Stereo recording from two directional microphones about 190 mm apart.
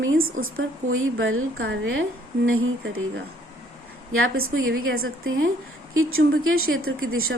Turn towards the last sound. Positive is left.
turn(degrees=-90)